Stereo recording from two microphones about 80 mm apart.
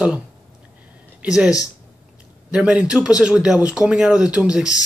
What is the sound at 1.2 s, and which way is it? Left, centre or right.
Speech, centre.